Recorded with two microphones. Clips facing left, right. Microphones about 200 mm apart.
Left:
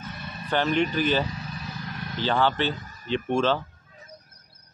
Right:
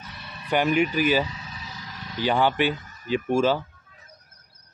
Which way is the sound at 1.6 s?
60° left (ahead or behind).